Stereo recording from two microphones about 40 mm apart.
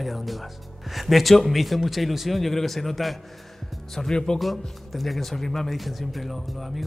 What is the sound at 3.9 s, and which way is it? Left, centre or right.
Speech, centre.